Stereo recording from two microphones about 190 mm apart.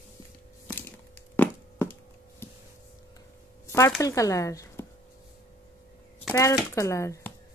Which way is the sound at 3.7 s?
15° left (ahead or behind).